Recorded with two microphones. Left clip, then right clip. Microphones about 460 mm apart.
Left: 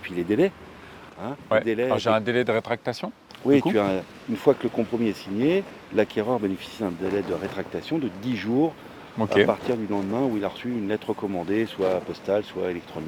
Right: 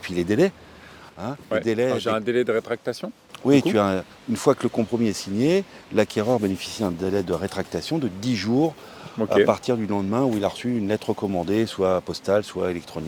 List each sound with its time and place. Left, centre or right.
0.0 s speech: right
1.6 s speech: right
2.0 s speech: centre
3.4 s speech: right
9.1 s speech: centre
9.5 s speech: right